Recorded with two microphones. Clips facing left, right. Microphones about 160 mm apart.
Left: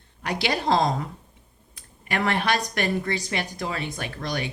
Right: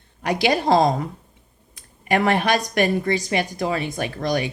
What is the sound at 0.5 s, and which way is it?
Speech, 45° right (ahead or behind).